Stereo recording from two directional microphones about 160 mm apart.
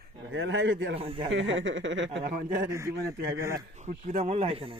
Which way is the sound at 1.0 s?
35° right (ahead or behind).